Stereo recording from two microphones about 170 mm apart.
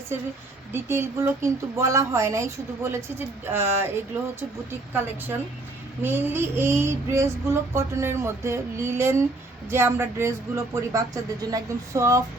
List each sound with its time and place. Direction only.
0.7 s child singing: 15° right (ahead or behind)